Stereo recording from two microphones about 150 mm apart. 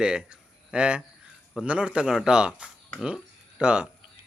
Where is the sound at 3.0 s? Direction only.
5° right (ahead or behind).